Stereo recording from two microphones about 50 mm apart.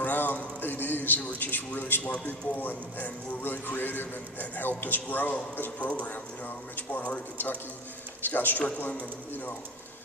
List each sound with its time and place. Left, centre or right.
0.0 s a sound: left
2.2 s a man's voice: left
8.2 s a man's voice: left